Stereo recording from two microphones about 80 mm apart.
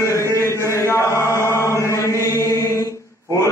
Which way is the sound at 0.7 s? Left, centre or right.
Left.